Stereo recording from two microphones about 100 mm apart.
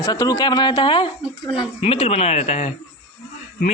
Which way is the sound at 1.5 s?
70° left (ahead or behind).